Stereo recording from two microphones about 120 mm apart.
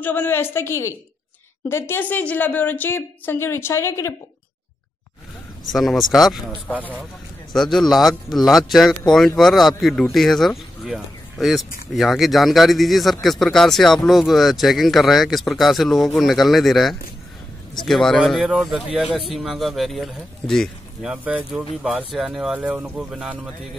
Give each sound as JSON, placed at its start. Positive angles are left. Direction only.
{"t": 0.0, "sound": "a woman's voice", "side_deg": 20}
{"t": 5.7, "sound": "speech", "side_deg": 0}
{"t": 7.5, "sound": "speech", "side_deg": 0}